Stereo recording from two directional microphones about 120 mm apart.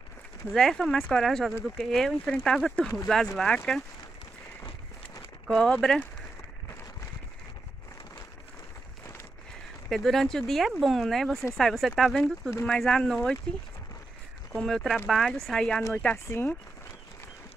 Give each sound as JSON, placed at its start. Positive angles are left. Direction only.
{"t": 0.5, "sound": "speech", "side_deg": 5}
{"t": 5.5, "sound": "speech", "side_deg": 5}
{"t": 9.8, "sound": "speech", "side_deg": 0}
{"t": 14.5, "sound": "speech", "side_deg": 5}